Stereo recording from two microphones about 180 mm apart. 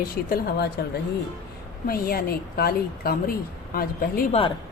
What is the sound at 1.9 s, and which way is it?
A woman's voice, 55° left (ahead or behind).